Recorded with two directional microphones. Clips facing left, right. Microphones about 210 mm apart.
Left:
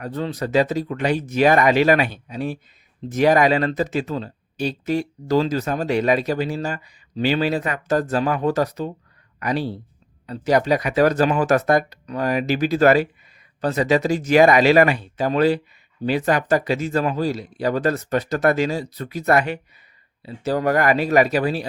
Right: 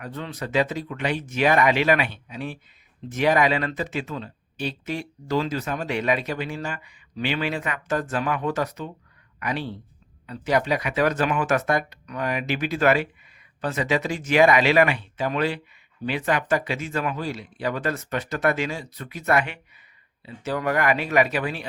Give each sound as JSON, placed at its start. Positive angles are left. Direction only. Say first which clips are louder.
{"t": 0.0, "sound": "speech", "louder": "left 7 dB", "side_deg": 40}